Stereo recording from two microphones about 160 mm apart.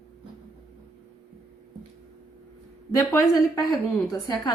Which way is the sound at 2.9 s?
20° left (ahead or behind).